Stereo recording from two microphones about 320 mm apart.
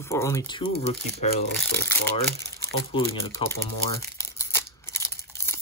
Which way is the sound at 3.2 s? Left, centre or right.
Centre.